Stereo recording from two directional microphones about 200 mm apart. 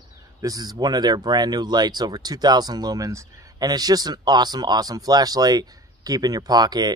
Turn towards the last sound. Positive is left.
turn(degrees=-20)  # may be behind; listen again after turning